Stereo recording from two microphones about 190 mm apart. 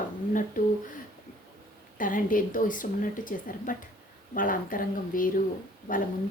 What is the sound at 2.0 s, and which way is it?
Speech, 45° left (ahead or behind).